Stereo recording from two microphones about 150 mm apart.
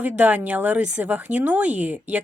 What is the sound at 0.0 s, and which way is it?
A woman's voice, 10° right (ahead or behind).